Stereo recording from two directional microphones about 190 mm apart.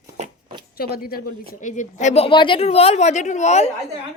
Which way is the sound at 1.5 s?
40° left (ahead or behind).